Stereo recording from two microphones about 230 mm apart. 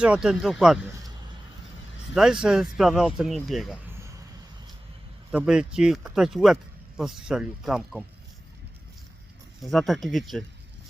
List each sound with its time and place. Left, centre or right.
0.0 s speech: centre
2.1 s speech: centre
5.3 s speech: centre
9.6 s speech: centre